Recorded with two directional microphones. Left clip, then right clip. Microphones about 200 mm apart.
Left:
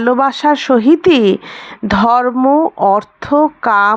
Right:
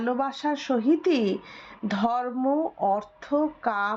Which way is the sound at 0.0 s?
35° left (ahead or behind).